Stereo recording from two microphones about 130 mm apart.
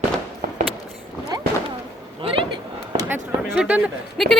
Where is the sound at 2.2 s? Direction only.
40° right (ahead or behind).